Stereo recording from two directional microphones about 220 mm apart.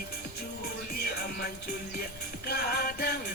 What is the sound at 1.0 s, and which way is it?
Music, 45° left (ahead or behind).